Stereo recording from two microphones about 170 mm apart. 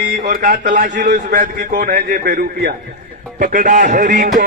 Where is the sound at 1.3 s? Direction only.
55° right (ahead or behind).